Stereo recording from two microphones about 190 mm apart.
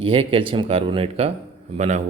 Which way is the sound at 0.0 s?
30° right (ahead or behind).